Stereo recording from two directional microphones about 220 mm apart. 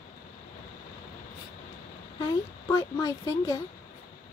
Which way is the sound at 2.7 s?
15° left (ahead or behind).